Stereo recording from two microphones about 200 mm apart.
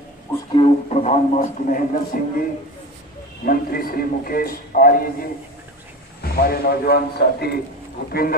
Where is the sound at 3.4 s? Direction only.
45° left (ahead or behind).